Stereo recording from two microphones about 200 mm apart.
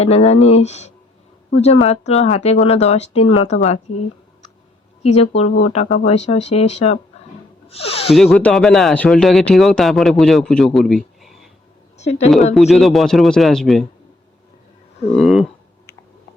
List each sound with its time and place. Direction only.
0.0 s speech: 30° left (ahead or behind)
5.0 s speech: 30° left (ahead or behind)
8.1 s speech: centre (ahead or behind)
10.8 s a sound: centre (ahead or behind)
11.9 s a woman's voice: 35° left (ahead or behind)
12.5 s speech: centre (ahead or behind)
15.1 s speech: centre (ahead or behind)